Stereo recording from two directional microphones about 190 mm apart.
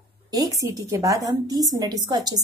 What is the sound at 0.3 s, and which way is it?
A woman's voice, 20° right (ahead or behind).